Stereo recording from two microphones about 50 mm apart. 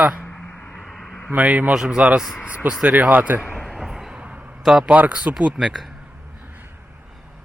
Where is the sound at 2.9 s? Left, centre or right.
Right.